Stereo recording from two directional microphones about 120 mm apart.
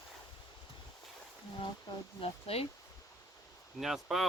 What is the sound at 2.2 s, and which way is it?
Speech, 55° left (ahead or behind).